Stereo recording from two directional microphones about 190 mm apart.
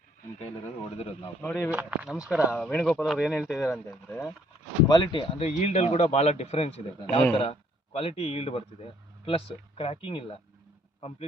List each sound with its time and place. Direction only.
0.3 s speech: 30° left (ahead or behind)
1.4 s speech: 10° left (ahead or behind)
1.7 s speech: 10° right (ahead or behind)
3.6 s speech: 15° left (ahead or behind)
4.9 s speech: 25° left (ahead or behind)